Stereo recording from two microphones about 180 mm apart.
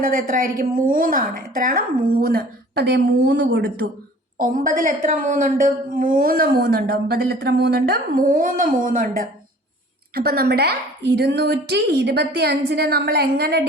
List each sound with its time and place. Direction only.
0.0 s a woman's voice: 50° right (ahead or behind); by 3.8 s 70° right (ahead or behind)
4.4 s a woman's voice: 50° right (ahead or behind)